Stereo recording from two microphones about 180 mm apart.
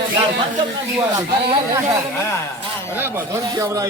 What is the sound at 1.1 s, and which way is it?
Speech, 20° right (ahead or behind).